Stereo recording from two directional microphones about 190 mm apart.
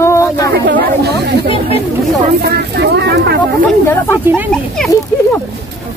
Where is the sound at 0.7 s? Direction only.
50° right (ahead or behind).